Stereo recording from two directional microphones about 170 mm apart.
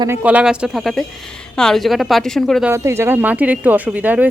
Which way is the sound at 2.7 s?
15° right (ahead or behind).